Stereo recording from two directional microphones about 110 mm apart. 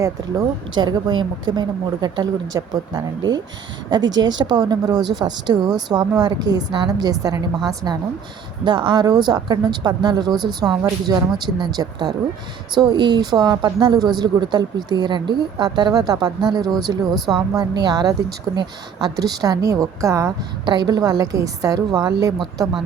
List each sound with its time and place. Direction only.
0.0 s speech: 35° right (ahead or behind)
20.7 s speech: 40° right (ahead or behind)